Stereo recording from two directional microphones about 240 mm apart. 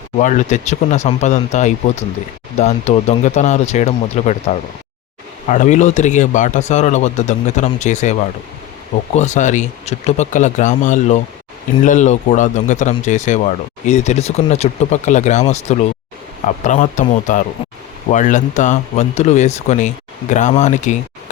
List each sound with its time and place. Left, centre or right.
0.2 s speech: left
5.5 s speech: left
9.1 s speech: left